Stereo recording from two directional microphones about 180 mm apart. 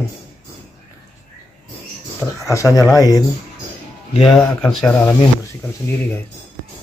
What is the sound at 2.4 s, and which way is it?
Speech, 15° left (ahead or behind).